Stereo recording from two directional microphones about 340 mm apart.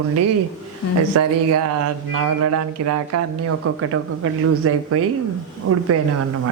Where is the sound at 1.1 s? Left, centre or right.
Right.